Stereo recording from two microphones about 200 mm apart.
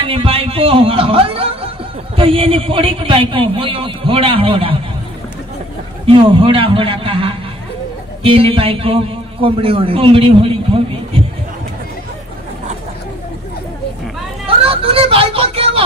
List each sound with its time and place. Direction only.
0.0 s a man's voice: 25° right (ahead or behind)
6.0 s a man's voice: 25° right (ahead or behind)
14.6 s a sound: 30° right (ahead or behind)